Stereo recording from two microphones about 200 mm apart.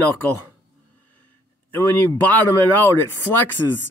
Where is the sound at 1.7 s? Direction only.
10° left (ahead or behind).